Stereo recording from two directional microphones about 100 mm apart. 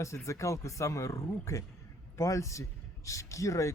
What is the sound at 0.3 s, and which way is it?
Speech, 30° left (ahead or behind).